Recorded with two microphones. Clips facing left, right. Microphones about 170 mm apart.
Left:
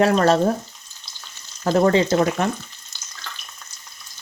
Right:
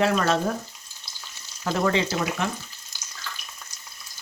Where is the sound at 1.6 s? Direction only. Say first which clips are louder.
Left 7 dB; 40° left (ahead or behind).